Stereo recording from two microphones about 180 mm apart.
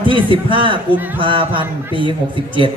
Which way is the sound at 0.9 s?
10° right (ahead or behind).